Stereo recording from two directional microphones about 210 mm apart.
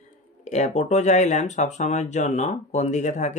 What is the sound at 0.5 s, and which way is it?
Speech, 35° left (ahead or behind).